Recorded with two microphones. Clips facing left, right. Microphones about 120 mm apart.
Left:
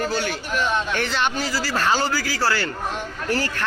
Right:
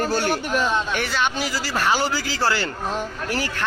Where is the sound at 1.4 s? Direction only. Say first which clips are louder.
Even; 15° right (ahead or behind).